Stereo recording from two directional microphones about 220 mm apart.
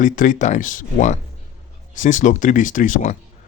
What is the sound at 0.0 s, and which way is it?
Speech, 35° left (ahead or behind).